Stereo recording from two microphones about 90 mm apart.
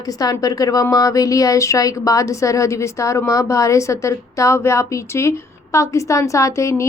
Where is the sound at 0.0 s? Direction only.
45° left (ahead or behind).